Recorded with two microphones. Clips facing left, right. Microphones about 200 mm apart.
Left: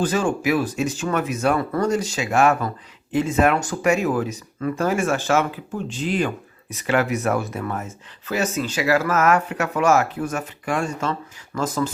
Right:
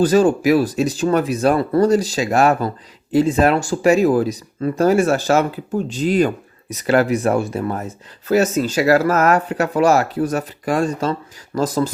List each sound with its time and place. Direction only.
0.0 s speech: 40° right (ahead or behind)